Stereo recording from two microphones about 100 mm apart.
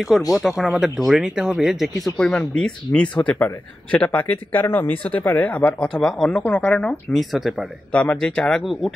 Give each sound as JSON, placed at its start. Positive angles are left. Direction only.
{"t": 0.3, "sound": "speech", "side_deg": 0}
{"t": 2.1, "sound": "speech", "side_deg": 10}
{"t": 5.8, "sound": "speech", "side_deg": 5}
{"t": 7.9, "sound": "speech", "side_deg": 10}